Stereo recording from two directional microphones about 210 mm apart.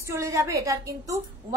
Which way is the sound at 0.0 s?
15° right (ahead or behind).